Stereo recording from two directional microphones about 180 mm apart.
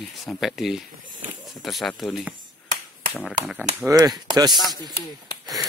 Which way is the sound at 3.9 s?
20° right (ahead or behind).